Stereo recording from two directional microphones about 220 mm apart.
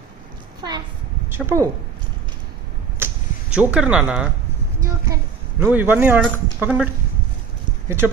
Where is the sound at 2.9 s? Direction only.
10° right (ahead or behind).